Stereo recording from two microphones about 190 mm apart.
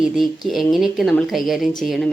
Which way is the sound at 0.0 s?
Centre (ahead or behind).